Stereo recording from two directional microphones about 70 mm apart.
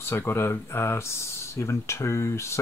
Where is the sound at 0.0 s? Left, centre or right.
Left.